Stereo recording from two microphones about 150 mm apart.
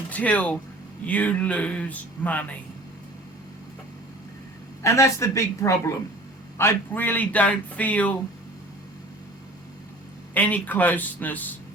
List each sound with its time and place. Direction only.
0.1 s speech: 10° left (ahead or behind)
4.8 s a woman's voice: 20° left (ahead or behind)
10.3 s speech: 10° left (ahead or behind)